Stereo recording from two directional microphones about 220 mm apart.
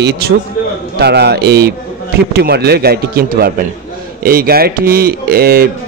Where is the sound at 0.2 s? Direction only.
45° right (ahead or behind).